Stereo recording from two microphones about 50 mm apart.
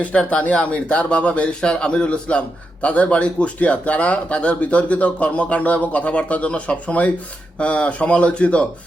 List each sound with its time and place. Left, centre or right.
0.0 s speech: left